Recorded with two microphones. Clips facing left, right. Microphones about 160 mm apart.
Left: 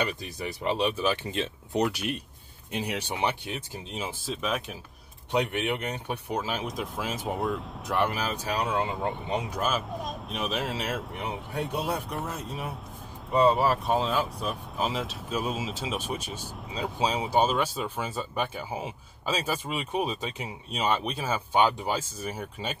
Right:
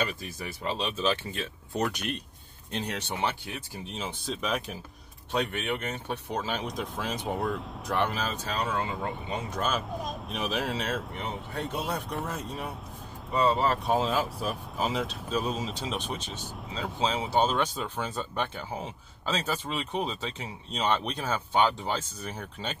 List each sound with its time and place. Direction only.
0.0 s speech: 20° left (ahead or behind)
1.9 s speech: 10° left (ahead or behind)
4.3 s speech: centre (ahead or behind)
5.3 s speech: 15° left (ahead or behind)
9.5 s speech: 5° left (ahead or behind)
13.3 s speech: 20° left (ahead or behind)
13.6 s speech: 5° left (ahead or behind)